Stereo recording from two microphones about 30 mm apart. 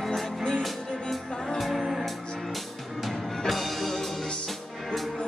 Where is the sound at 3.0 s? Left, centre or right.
Centre.